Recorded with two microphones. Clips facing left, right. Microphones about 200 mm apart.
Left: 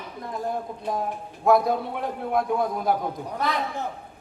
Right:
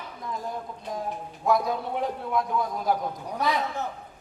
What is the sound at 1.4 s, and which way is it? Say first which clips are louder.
Speech: left 5 dB; 55° left (ahead or behind).